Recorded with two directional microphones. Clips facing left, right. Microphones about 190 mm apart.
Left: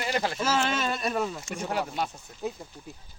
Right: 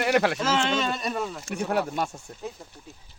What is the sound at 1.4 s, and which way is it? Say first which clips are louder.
Speech: right 4 dB; 60° right (ahead or behind).